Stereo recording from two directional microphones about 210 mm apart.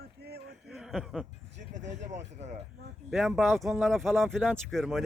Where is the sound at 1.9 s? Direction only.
35° right (ahead or behind).